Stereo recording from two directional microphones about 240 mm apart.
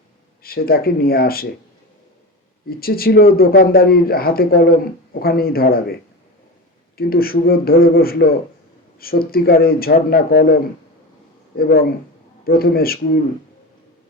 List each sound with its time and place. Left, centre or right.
0.4 s speech: left
2.6 s speech: left
11.5 s speech: left